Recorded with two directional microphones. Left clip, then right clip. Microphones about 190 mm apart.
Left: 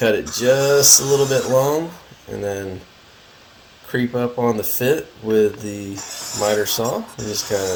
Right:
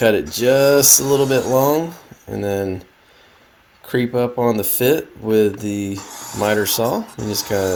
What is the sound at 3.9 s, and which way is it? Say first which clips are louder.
Speech: right 3 dB; 45° right (ahead or behind).